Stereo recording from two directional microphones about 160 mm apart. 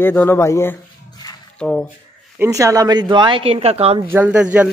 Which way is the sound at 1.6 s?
5° left (ahead or behind).